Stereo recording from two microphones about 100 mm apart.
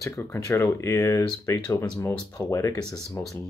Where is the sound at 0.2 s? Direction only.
25° left (ahead or behind).